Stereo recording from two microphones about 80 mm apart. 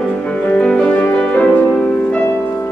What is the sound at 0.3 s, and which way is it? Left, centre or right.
Music, centre.